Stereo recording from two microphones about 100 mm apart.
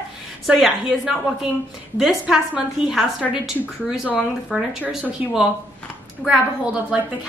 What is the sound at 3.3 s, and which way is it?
Speech, 5° right (ahead or behind).